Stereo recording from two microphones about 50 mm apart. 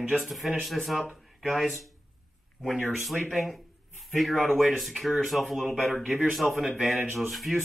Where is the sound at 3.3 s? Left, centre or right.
Centre.